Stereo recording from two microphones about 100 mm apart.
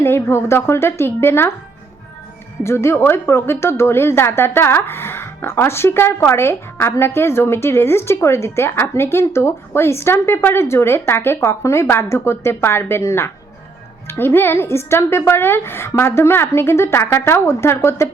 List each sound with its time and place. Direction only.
0.0 s a woman's voice: 25° left (ahead or behind)
2.6 s a woman's voice: 25° left (ahead or behind)